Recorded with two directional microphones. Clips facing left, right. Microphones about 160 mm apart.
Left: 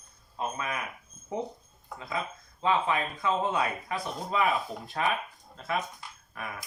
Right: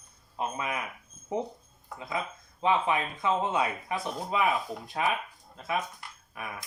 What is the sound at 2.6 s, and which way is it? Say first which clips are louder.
Speech: right 1 dB; 20° right (ahead or behind).